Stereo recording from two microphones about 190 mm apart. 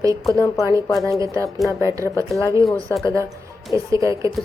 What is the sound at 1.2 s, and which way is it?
Speech, 15° right (ahead or behind).